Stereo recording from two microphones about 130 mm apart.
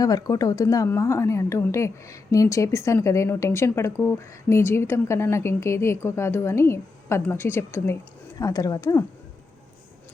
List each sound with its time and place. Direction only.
0.0 s a woman's voice: 30° left (ahead or behind)